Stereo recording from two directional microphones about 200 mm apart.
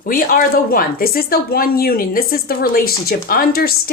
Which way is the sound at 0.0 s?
45° left (ahead or behind).